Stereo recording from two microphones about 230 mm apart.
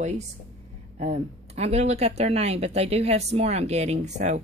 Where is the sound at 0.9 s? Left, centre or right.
Right.